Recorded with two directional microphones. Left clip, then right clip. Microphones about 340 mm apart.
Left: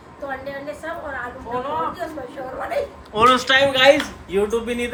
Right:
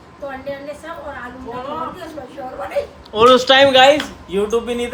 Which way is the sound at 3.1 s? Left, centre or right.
Centre.